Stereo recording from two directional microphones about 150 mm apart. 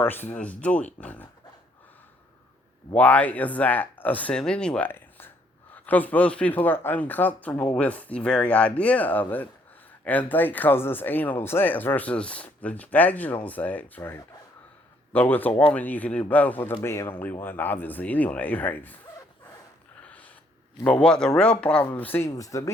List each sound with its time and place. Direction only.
0.0 s speech: 15° left (ahead or behind)
2.9 s speech: 10° left (ahead or behind)
20.1 s a sound: 10° left (ahead or behind)
20.8 s speech: 5° left (ahead or behind)